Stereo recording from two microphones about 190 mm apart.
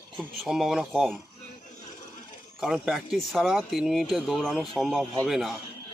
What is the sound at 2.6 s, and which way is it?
Speech, centre (ahead or behind).